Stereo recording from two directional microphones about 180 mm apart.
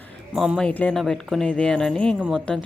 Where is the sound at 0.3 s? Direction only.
Centre (ahead or behind).